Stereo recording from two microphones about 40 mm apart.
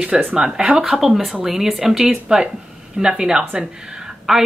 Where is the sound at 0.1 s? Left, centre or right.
Right.